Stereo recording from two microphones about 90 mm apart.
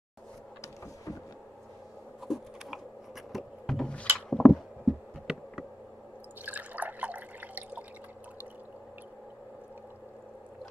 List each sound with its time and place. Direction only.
2.2 s insect: centre (ahead or behind)
3.3 s a sound: 5° left (ahead or behind)
5.2 s insect: 5° right (ahead or behind)
6.4 s drip: 20° right (ahead or behind)